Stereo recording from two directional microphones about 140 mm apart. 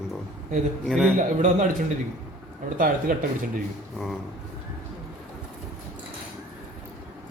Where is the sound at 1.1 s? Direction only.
65° right (ahead or behind).